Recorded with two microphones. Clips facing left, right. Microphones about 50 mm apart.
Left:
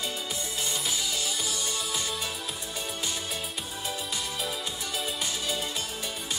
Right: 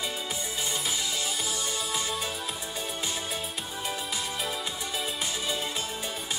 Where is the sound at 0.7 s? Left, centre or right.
Centre.